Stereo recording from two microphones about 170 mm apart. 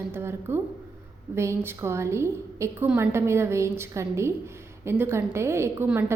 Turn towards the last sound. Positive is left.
turn(degrees=-15)  # may be behind; listen again after turning